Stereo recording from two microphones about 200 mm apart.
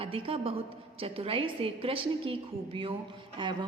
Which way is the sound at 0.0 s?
30° right (ahead or behind).